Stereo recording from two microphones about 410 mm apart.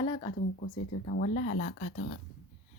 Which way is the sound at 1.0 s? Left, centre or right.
Left.